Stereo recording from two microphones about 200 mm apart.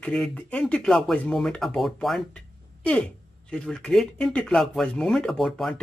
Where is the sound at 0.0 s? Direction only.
5° left (ahead or behind).